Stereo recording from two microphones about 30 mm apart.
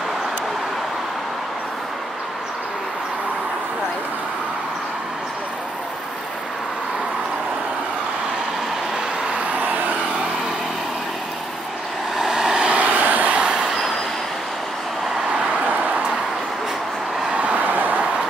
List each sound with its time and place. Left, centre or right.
12.2 s vehicle: centre
12.7 s vehicle: right
13.0 s vehicle: right
13.4 s train: right
17.4 s vehicle: right
17.7 s vehicle: right